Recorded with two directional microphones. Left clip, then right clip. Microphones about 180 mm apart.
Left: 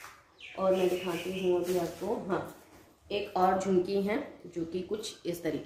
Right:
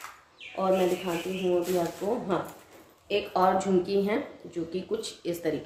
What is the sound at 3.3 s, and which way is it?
A woman's voice, 5° right (ahead or behind).